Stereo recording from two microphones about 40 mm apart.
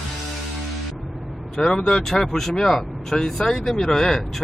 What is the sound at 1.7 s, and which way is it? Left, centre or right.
Speech, centre.